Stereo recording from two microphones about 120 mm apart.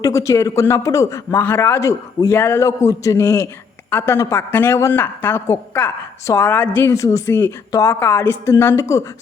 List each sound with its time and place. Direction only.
0.0 s a man's voice: 25° left (ahead or behind)
6.9 s a man's voice: 25° left (ahead or behind)